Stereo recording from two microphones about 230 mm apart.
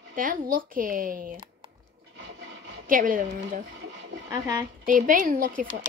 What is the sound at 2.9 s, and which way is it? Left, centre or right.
Speech, right.